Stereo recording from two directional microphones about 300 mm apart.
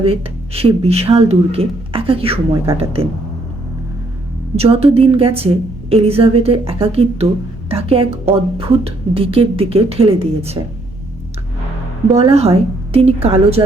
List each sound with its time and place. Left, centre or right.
0.0 s speech: centre
4.5 s speech: centre
12.1 s speech: centre